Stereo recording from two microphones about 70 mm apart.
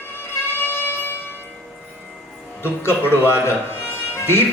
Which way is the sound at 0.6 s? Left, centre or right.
Left.